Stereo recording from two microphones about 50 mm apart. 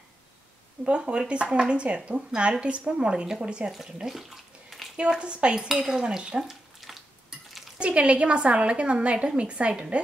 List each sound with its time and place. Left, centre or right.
0.8 s a woman's voice: right
2.9 s dishes: right
3.7 s speech: centre
4.9 s dishes: centre
6.8 s stir: centre
7.8 s a woman's voice: right